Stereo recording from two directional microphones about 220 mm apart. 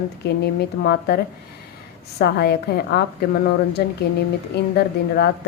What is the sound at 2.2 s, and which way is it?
A woman's voice, 45° left (ahead or behind).